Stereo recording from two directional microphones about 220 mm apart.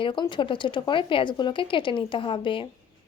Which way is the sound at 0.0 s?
20° left (ahead or behind).